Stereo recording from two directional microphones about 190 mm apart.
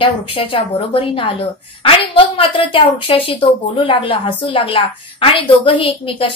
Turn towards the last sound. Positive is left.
turn(degrees=30)  # may be behind; listen again after turning